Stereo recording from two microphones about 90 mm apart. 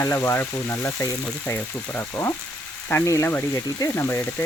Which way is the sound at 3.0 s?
30° left (ahead or behind).